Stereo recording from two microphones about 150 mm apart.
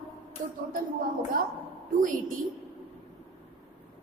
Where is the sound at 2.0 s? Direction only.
65° right (ahead or behind).